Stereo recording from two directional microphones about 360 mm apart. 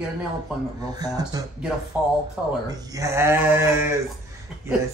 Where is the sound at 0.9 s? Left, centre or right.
Centre.